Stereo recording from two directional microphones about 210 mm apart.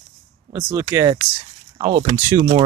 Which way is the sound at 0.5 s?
15° right (ahead or behind).